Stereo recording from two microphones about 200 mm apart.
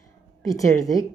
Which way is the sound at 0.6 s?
15° left (ahead or behind).